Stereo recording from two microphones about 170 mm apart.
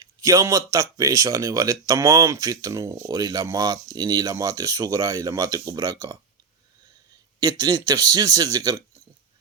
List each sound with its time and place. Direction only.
0.0 s speech: 20° right (ahead or behind)
7.6 s speech: 25° right (ahead or behind)